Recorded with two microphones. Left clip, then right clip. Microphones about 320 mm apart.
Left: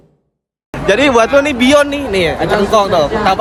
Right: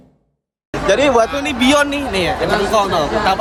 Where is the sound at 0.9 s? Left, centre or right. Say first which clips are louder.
Left 3 dB; left.